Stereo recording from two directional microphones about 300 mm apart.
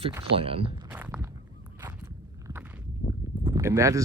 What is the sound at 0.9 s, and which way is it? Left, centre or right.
Walk, centre.